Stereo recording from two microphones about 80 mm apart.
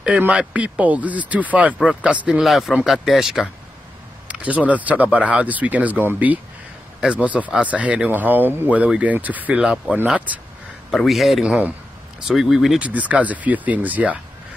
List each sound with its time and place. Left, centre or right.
0.2 s a man's voice: centre
4.3 s a man's voice: centre
11.1 s speech: centre
11.4 s a man's voice: centre
12.8 s speech: centre